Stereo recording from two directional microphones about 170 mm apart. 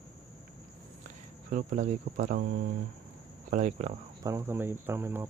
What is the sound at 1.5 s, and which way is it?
Speech, 45° right (ahead or behind).